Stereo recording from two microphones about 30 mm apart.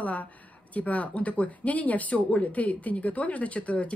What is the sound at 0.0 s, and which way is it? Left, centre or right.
Speech, left.